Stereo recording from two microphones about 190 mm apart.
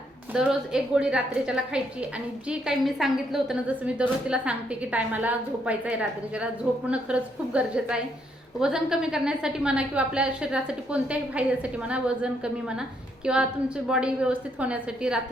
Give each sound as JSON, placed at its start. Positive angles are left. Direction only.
{"t": 0.3, "sound": "a woman's voice", "side_deg": -5}